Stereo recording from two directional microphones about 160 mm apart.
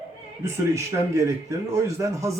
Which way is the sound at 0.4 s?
20° right (ahead or behind).